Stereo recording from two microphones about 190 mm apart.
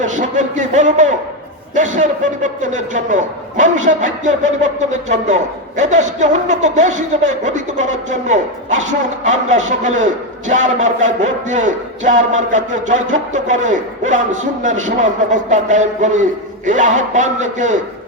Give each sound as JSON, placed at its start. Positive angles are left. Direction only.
{"t": 0.0, "sound": "a man's voice", "side_deg": -40}